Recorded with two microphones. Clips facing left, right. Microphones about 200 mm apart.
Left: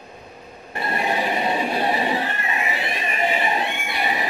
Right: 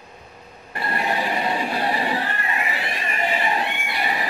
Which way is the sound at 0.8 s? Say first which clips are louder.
Left 1 dB; 20° left (ahead or behind).